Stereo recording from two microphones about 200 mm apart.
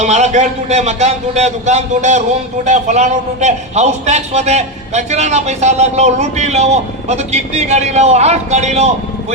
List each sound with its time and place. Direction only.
0.0 s a man's voice: 35° right (ahead or behind)